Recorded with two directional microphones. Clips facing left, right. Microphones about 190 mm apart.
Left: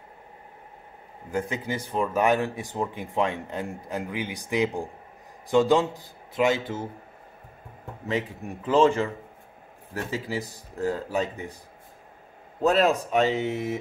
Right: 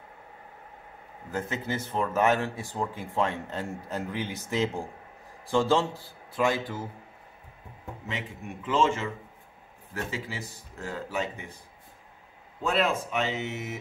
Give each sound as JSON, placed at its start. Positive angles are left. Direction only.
{"t": 1.3, "sound": "speech", "side_deg": 15}
{"t": 8.6, "sound": "speech", "side_deg": 35}
{"t": 10.1, "sound": "speech", "side_deg": 35}
{"t": 12.6, "sound": "speech", "side_deg": 40}